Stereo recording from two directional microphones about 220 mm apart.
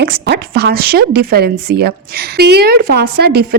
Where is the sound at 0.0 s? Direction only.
50° right (ahead or behind).